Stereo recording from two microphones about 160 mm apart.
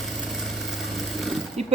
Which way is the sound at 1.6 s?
40° right (ahead or behind).